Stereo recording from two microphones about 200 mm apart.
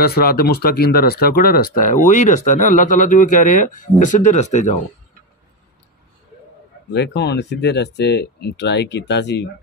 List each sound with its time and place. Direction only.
0.0 s speech: 50° left (ahead or behind)
6.9 s speech: 55° left (ahead or behind)